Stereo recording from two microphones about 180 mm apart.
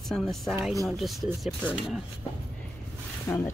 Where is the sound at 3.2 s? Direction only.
15° left (ahead or behind).